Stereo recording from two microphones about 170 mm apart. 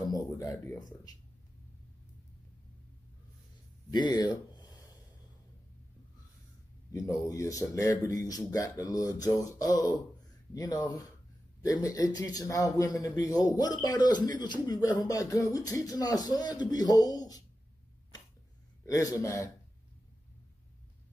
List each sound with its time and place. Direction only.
0.1 s a sound: 20° left (ahead or behind)
3.9 s speech: 25° left (ahead or behind)
7.1 s speech: 20° left (ahead or behind)
18.9 s speech: 20° left (ahead or behind)